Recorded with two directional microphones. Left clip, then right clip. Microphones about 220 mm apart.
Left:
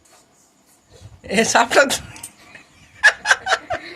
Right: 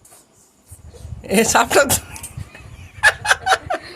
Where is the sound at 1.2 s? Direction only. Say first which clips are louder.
Right 1 dB; 30° right (ahead or behind).